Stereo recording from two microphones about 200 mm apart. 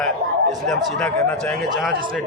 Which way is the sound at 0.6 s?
5° left (ahead or behind).